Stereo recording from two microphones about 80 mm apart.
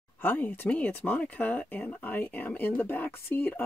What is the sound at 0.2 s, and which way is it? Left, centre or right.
Speech, left.